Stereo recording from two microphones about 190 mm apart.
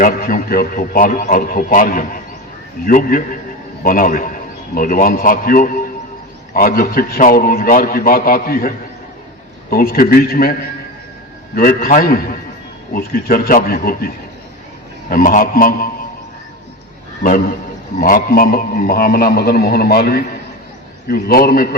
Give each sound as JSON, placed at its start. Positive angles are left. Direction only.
{"t": 0.0, "sound": "a man's voice", "side_deg": 50}
{"t": 11.5, "sound": "a man's voice", "side_deg": 50}
{"t": 15.1, "sound": "a man's voice", "side_deg": 45}
{"t": 18.0, "sound": "a man's voice", "side_deg": 50}